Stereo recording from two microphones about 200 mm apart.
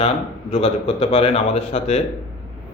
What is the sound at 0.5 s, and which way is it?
A man's voice, 30° left (ahead or behind).